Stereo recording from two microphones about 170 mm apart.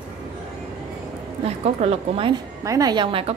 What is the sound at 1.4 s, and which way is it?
Speech, 35° right (ahead or behind).